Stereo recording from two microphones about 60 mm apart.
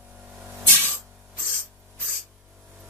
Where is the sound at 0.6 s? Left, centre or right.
Left.